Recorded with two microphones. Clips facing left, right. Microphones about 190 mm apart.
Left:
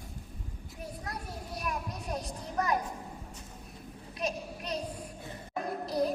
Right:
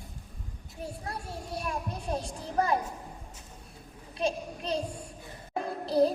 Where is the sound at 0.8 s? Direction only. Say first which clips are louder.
Right 3 dB; 30° right (ahead or behind).